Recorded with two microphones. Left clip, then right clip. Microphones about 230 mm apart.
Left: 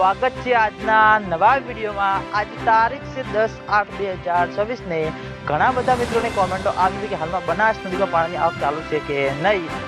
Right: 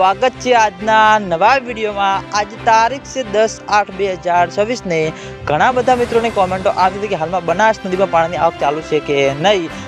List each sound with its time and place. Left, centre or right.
0.0 s speech: right